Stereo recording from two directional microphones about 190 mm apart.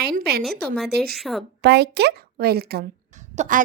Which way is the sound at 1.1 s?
Centre (ahead or behind).